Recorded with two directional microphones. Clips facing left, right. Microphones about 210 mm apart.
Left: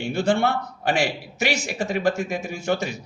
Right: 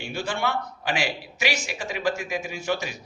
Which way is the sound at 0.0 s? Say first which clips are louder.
Left 7 dB; 55° left (ahead or behind).